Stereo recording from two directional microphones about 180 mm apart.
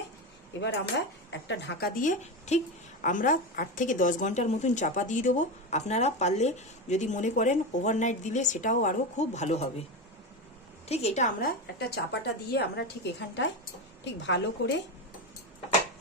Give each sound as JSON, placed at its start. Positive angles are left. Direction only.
{"t": 0.6, "sound": "cutlery", "side_deg": 80}
{"t": 2.0, "sound": "a woman's voice", "side_deg": 40}
{"t": 10.9, "sound": "a woman's voice", "side_deg": 35}
{"t": 11.8, "sound": "a woman's voice", "side_deg": 65}
{"t": 14.0, "sound": "a woman's voice", "side_deg": 80}